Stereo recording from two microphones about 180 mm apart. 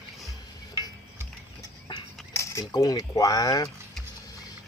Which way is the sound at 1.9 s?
25° left (ahead or behind).